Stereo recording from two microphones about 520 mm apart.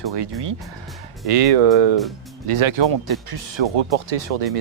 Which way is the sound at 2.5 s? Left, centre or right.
Right.